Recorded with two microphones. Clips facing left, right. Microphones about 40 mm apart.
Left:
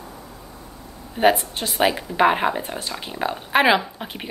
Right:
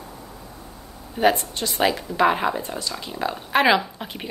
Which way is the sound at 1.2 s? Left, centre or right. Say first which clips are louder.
Left 2 dB; left.